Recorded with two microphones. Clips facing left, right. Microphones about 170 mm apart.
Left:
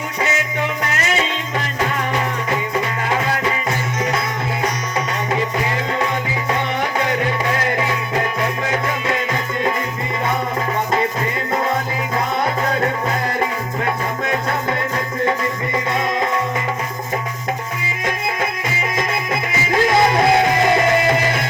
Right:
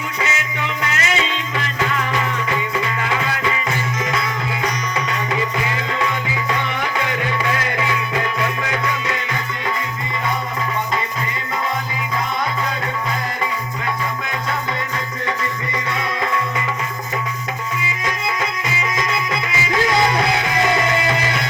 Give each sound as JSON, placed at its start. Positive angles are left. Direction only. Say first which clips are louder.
{"t": 0.8, "sound": "music", "louder": "left 1 dB", "side_deg": 45}
{"t": 18.0, "sound": "music", "louder": "left 3 dB", "side_deg": 50}